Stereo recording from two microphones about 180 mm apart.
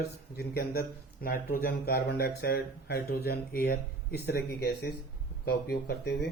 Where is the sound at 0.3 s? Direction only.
60° left (ahead or behind).